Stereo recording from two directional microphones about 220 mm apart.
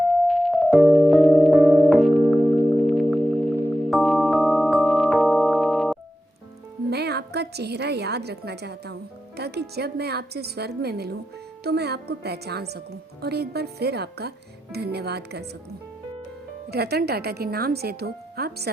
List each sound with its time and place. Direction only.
0.3 s music: centre (ahead or behind)
6.9 s a woman's voice: 50° right (ahead or behind)
16.7 s a woman's voice: 45° right (ahead or behind)